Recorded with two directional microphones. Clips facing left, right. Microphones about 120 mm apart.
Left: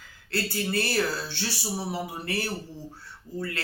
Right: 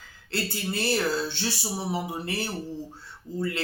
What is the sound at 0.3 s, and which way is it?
Speech, 25° right (ahead or behind).